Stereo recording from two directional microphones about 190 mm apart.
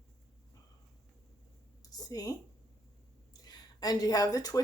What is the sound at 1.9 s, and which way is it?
Speech, 20° left (ahead or behind).